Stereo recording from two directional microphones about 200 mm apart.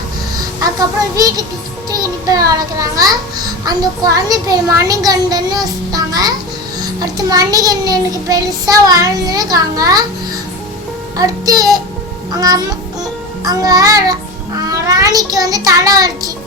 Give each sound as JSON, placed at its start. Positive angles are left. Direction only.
{"t": 0.6, "sound": "a child's voice", "side_deg": -15}
{"t": 11.2, "sound": "a child's voice", "side_deg": -20}
{"t": 14.7, "sound": "child singing", "side_deg": -15}